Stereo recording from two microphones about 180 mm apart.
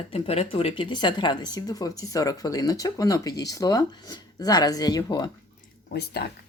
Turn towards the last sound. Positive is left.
turn(degrees=65)  # may be behind; listen again after turning